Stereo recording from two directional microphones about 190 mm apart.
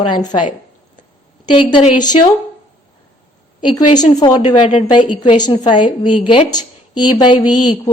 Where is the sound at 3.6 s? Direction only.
25° left (ahead or behind).